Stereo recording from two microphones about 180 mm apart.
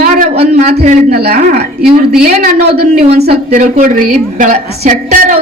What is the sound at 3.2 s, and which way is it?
A woman's voice, 40° right (ahead or behind).